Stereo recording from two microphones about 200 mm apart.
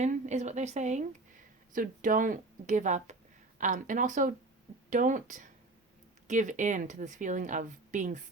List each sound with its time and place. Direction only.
0.0 s a woman's voice: 35° right (ahead or behind)